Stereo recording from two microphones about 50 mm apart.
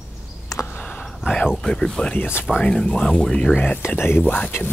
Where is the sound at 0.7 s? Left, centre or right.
Left.